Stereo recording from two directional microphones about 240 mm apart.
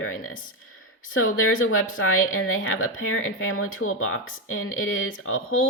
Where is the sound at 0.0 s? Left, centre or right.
Left.